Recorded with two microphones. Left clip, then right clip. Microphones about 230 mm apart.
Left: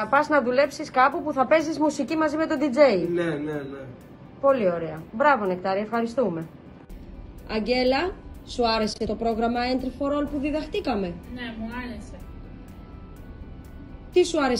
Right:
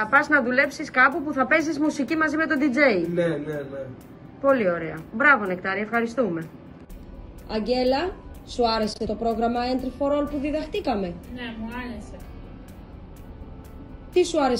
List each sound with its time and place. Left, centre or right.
0.1 s a woman's voice: centre
3.3 s a woman's voice: centre
4.5 s a woman's voice: centre
7.4 s a woman's voice: centre
14.1 s a woman's voice: centre